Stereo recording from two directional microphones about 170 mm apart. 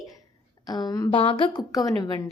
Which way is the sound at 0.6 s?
25° left (ahead or behind).